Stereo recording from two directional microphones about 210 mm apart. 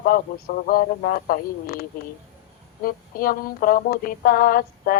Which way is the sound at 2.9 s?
45° left (ahead or behind).